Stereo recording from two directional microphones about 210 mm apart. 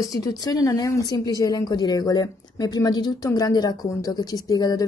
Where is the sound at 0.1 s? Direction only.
15° left (ahead or behind).